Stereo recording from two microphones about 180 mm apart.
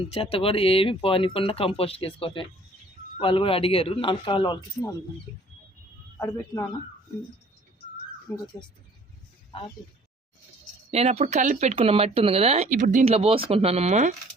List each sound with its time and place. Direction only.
0.1 s speech: 30° left (ahead or behind)
6.1 s speech: 15° left (ahead or behind)
8.3 s speech: 15° left (ahead or behind)
10.9 s speech: 35° right (ahead or behind)